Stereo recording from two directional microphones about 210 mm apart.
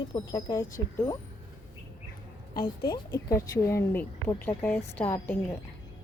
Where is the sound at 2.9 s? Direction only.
20° left (ahead or behind).